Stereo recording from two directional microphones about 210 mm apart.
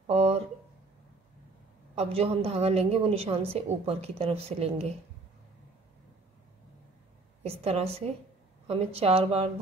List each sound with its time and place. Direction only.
0.0 s a sound: 30° right (ahead or behind)
2.0 s a woman's voice: 30° right (ahead or behind)
7.4 s a woman's voice: 30° right (ahead or behind)